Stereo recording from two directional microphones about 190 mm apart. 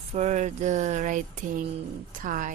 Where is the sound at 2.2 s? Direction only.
45° right (ahead or behind).